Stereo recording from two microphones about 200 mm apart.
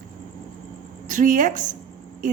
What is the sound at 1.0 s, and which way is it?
Speech, 40° right (ahead or behind).